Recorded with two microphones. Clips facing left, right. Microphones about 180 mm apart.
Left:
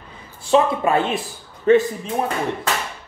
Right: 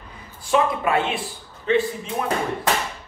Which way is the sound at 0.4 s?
25° left (ahead or behind).